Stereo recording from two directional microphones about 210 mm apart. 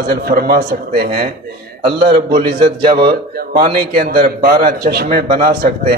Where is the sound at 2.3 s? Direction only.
25° right (ahead or behind).